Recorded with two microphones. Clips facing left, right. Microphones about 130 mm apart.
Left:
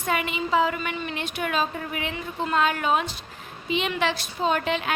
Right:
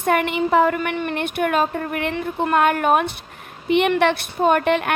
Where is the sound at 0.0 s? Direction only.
55° right (ahead or behind).